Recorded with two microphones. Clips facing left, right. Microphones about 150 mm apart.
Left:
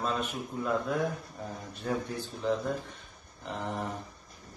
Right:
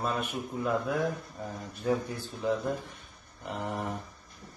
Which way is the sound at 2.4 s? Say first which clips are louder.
Right 1 dB; 15° right (ahead or behind).